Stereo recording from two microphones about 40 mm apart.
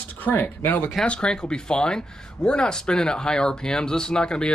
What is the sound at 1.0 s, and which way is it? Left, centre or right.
Speech, left.